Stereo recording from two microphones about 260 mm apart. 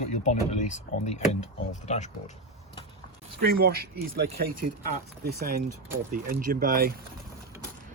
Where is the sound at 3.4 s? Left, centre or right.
Right.